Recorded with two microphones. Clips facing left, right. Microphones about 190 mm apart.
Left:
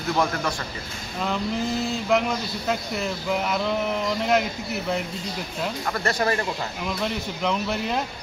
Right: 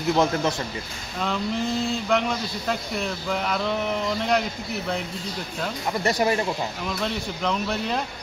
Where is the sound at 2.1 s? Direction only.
5° left (ahead or behind).